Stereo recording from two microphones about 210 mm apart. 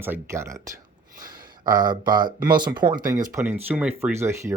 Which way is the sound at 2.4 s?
20° right (ahead or behind).